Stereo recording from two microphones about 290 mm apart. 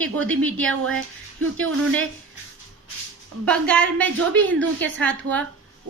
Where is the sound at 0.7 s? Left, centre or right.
Right.